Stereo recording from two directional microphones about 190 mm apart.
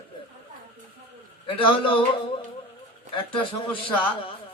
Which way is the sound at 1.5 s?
30° left (ahead or behind).